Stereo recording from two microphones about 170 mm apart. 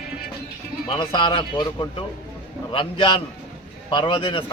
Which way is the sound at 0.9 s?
30° left (ahead or behind).